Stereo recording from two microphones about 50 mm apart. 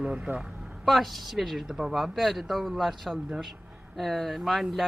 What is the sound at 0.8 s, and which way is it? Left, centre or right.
Speech, centre.